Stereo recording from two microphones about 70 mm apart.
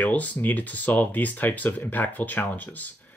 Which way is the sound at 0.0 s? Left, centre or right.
Left.